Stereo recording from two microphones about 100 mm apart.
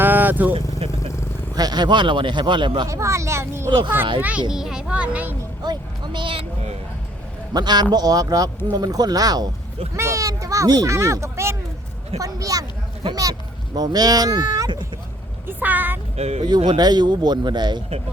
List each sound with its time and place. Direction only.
0.0 s vehicle: 20° right (ahead or behind)
0.5 s vehicle: 70° right (ahead or behind)
1.5 s speech: 45° right (ahead or behind)
2.8 s speech: 30° right (ahead or behind)
3.7 s speech: 55° right (ahead or behind)
4.2 s speech: 15° right (ahead or behind)
5.6 s speech: 50° right (ahead or behind)
7.5 s speech: 45° right (ahead or behind)
9.9 s speech: 30° right (ahead or behind)
13.7 s speech: 40° right (ahead or behind)
15.4 s speech: 15° right (ahead or behind)
16.1 s speech: 90° right
16.6 s speech: 45° right (ahead or behind)